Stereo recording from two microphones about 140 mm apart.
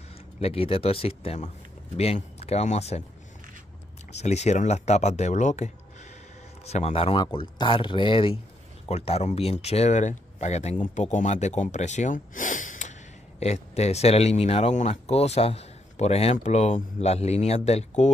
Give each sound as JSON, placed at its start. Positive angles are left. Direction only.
{"t": 0.4, "sound": "speech", "side_deg": 45}
{"t": 4.1, "sound": "speech", "side_deg": 50}
{"t": 10.8, "sound": "speech", "side_deg": 65}
{"t": 13.4, "sound": "speech", "side_deg": 50}